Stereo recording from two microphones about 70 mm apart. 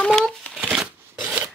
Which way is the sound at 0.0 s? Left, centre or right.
Centre.